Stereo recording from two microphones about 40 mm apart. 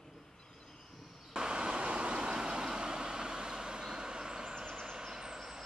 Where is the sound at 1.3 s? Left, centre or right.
Right.